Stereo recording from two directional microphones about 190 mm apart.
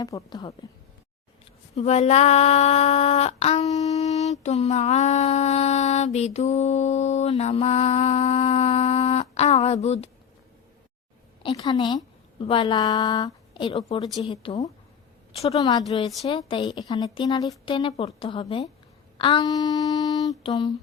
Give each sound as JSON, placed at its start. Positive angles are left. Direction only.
{"t": 0.0, "sound": "speech", "side_deg": 20}
{"t": 1.7, "sound": "speech", "side_deg": 35}
{"t": 11.4, "sound": "a woman's voice", "side_deg": 20}
{"t": 15.5, "sound": "speech", "side_deg": 20}